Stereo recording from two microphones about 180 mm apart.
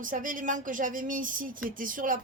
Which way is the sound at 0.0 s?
50° right (ahead or behind).